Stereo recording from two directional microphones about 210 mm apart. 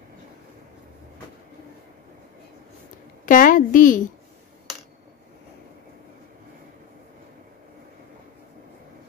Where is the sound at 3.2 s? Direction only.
40° left (ahead or behind).